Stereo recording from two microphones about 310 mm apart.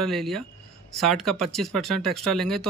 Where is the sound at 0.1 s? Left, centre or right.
Centre.